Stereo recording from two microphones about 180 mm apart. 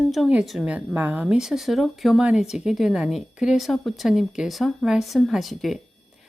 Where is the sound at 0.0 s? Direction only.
Centre (ahead or behind).